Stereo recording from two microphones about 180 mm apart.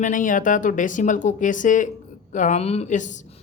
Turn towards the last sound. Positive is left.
turn(degrees=45)  # may be behind; listen again after turning